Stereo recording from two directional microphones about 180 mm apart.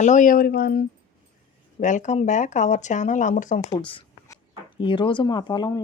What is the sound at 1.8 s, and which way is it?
Speech, 45° left (ahead or behind).